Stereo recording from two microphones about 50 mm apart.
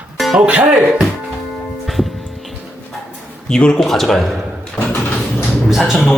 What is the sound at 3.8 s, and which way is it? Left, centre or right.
Speech, centre.